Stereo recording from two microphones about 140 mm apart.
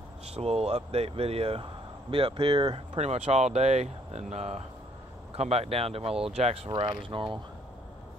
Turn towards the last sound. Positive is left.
turn(degrees=-35)  # may be behind; listen again after turning